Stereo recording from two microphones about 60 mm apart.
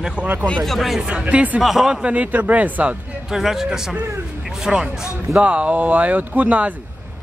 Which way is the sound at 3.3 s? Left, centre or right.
Centre.